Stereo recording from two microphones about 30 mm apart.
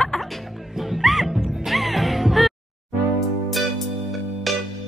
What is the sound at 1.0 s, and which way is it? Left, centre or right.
Music, centre.